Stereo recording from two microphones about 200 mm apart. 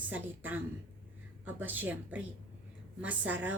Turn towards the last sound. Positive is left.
turn(degrees=-10)  # may be behind; listen again after turning